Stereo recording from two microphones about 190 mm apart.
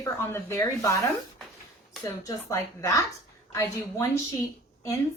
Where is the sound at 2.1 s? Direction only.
15° left (ahead or behind).